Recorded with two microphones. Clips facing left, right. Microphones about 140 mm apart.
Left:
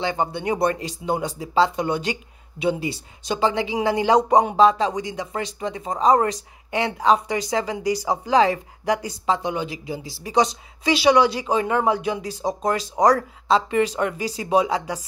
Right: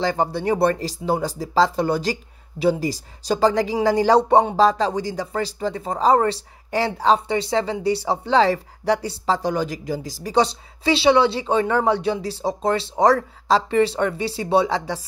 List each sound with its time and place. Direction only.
0.0 s speech: 35° right (ahead or behind)